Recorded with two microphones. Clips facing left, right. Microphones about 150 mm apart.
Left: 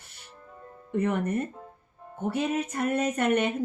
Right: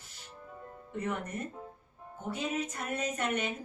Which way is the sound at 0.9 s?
60° left (ahead or behind).